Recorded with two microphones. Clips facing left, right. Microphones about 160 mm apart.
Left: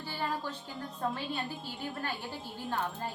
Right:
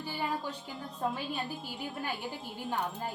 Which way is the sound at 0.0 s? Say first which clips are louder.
Right 1 dB; 15° right (ahead or behind).